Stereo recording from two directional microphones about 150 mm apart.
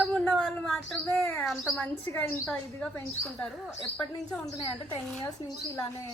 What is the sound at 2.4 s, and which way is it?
A woman's voice, 5° left (ahead or behind).